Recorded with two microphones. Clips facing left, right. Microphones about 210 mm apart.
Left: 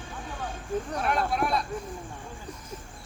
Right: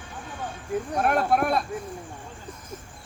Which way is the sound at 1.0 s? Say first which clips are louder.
Right 6 dB; 55° right (ahead or behind).